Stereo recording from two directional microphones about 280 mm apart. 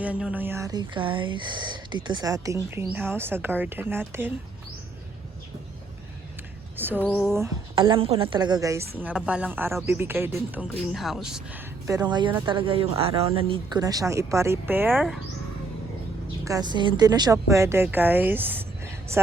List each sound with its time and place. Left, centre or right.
0.0 s speech: centre
6.7 s speech: centre
11.9 s speech: centre
16.4 s speech: centre